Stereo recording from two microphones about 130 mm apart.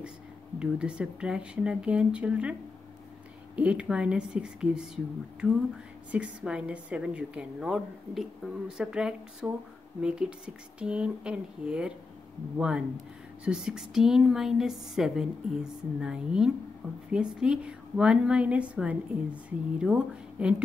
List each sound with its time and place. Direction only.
0.6 s a woman's voice: 5° right (ahead or behind)
3.5 s a woman's voice: 10° right (ahead or behind)